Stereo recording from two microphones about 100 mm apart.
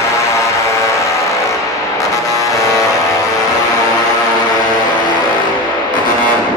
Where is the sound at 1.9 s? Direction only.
35° left (ahead or behind).